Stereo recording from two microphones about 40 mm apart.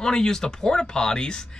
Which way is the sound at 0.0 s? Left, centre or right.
Centre.